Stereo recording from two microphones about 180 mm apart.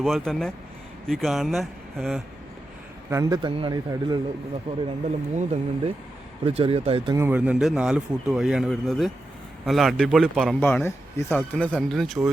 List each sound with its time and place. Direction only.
0.0 s speech: centre (ahead or behind)
3.1 s speech: 20° right (ahead or behind)
7.2 s speech: 10° right (ahead or behind)